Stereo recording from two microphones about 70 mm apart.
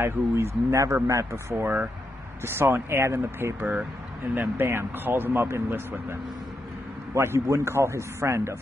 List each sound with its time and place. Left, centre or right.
0.0 s speech: right
7.2 s speech: right